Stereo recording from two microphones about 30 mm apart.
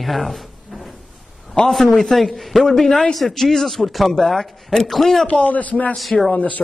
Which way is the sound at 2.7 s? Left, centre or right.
Centre.